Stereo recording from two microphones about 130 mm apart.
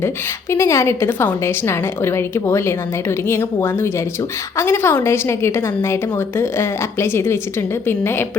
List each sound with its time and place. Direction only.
0.5 s a woman's voice: 20° left (ahead or behind)